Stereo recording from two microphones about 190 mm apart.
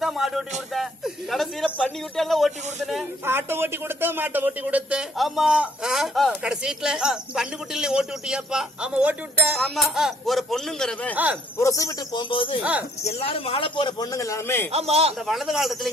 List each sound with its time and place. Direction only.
0.0 s a sound: centre (ahead or behind)
0.7 s a man's voice: centre (ahead or behind)
3.2 s a man's voice: 10° right (ahead or behind)
11.1 s speech: 10° right (ahead or behind)
11.5 s a man's voice: 15° left (ahead or behind)
14.7 s a man's voice: 35° right (ahead or behind)
15.3 s a man's voice: centre (ahead or behind)